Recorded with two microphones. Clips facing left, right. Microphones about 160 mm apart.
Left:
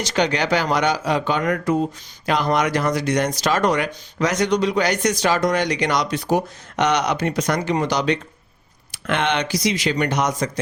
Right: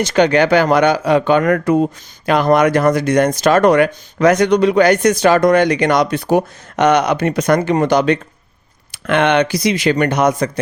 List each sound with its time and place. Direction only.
0.0 s speech: 55° right (ahead or behind)